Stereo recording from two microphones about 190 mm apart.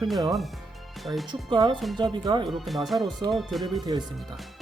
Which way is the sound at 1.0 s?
Centre (ahead or behind).